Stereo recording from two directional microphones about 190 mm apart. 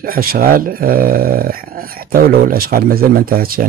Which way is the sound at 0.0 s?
50° right (ahead or behind).